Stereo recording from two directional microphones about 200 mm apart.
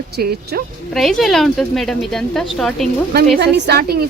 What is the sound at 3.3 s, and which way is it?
Speech, 55° right (ahead or behind).